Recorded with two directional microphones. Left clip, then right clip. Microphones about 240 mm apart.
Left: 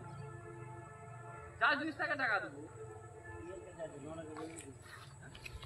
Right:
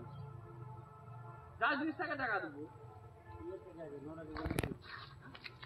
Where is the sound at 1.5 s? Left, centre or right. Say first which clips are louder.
Left 2 dB; right.